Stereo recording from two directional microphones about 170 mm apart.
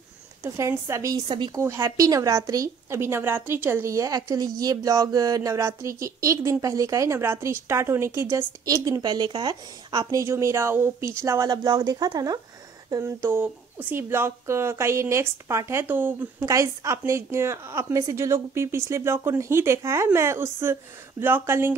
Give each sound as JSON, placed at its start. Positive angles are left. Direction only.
{"t": 0.4, "sound": "a woman's voice", "side_deg": -15}